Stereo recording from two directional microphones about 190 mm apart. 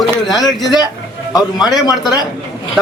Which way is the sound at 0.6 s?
20° left (ahead or behind).